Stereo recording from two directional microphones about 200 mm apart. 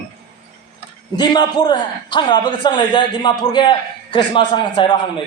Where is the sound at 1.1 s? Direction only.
20° left (ahead or behind).